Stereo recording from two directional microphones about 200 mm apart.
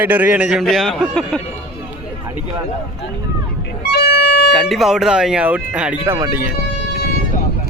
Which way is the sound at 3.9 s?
55° left (ahead or behind).